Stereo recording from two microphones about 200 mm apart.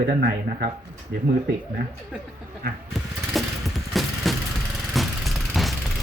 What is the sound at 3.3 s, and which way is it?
Vehicle, centre (ahead or behind).